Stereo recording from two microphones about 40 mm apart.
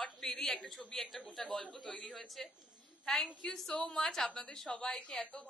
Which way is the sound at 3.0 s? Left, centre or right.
Centre.